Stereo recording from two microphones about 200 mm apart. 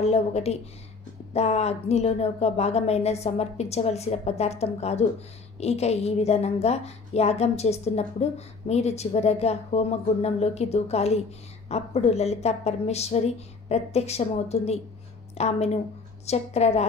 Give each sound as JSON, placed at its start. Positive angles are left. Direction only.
{"t": 0.1, "sound": "a woman's voice", "side_deg": 30}